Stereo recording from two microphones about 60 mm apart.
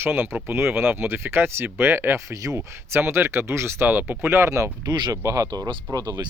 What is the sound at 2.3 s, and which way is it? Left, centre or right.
Speech, right.